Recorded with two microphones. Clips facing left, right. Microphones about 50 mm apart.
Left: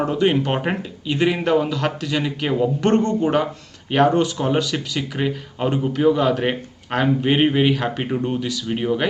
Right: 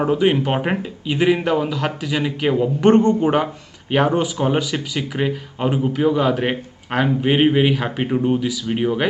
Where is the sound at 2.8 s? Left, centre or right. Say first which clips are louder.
Right 7 dB; right.